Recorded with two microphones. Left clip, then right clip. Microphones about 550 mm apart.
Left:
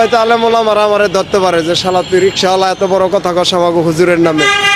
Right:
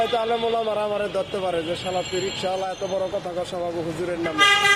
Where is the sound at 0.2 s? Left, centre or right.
Left.